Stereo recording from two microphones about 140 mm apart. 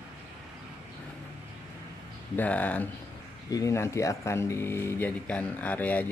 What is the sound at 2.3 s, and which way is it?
Speech, 10° left (ahead or behind).